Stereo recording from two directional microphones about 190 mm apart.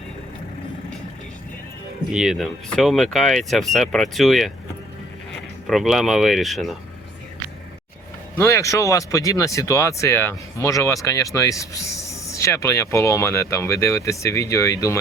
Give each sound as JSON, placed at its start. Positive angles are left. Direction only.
{"t": 2.0, "sound": "speech", "side_deg": 0}
{"t": 5.6, "sound": "speech", "side_deg": 0}
{"t": 8.4, "sound": "speech", "side_deg": 15}